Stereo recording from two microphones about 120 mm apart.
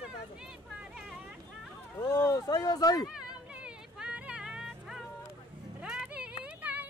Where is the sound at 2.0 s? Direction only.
30° left (ahead or behind).